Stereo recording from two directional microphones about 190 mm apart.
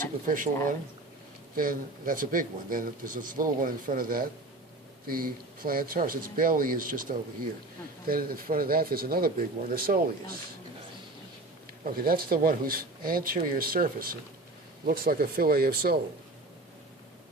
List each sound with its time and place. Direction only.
0.3 s speech: 45° right (ahead or behind)
11.9 s speech: 50° right (ahead or behind)